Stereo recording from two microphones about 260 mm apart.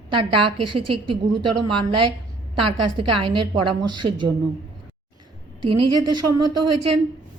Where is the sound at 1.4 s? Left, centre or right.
Right.